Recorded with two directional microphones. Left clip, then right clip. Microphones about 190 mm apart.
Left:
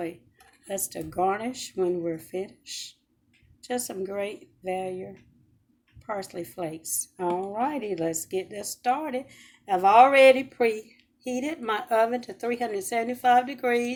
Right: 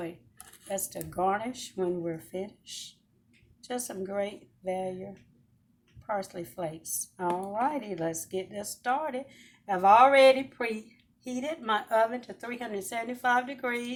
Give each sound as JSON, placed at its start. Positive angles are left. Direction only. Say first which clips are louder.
{"t": 0.7, "sound": "speech", "louder": "left 2 dB", "side_deg": 35}
{"t": 3.7, "sound": "speech", "louder": "left 4 dB", "side_deg": 45}
{"t": 6.6, "sound": "speech", "louder": "left 1 dB", "side_deg": 40}